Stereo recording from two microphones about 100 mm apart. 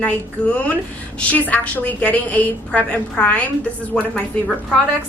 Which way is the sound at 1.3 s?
15° left (ahead or behind).